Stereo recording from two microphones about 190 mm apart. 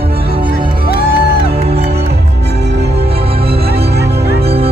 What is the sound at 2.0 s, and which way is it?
Music, 60° right (ahead or behind).